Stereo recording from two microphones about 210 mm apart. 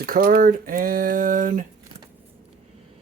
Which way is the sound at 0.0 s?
45° right (ahead or behind).